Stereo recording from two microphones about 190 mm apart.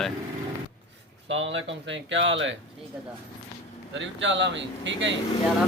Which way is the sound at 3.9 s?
75° right (ahead or behind).